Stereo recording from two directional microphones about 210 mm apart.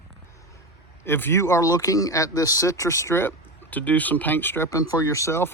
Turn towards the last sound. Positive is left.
turn(degrees=15)  # may be behind; listen again after turning